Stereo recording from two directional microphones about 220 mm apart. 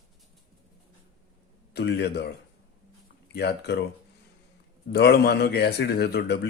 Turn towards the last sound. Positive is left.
turn(degrees=50)  # may be behind; listen again after turning